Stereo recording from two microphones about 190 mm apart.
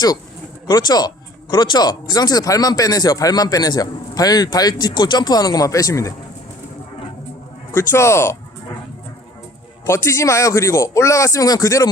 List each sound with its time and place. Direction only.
0.7 s speech: 20° left (ahead or behind)
7.7 s speech: 15° left (ahead or behind)
9.8 s speech: 15° left (ahead or behind)